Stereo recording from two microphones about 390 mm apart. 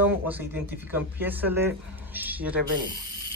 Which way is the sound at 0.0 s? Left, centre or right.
Centre.